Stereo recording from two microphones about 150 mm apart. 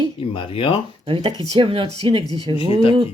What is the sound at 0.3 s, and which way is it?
Speech, 35° left (ahead or behind).